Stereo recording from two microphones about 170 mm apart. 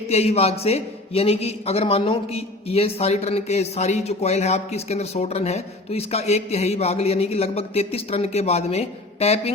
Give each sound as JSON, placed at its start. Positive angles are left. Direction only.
{"t": 0.1, "sound": "a man's voice", "side_deg": 40}